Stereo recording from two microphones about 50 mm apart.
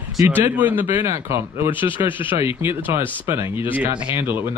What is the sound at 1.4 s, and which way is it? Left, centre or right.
Speech, right.